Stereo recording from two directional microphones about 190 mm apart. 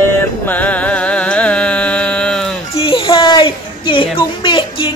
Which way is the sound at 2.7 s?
30° left (ahead or behind).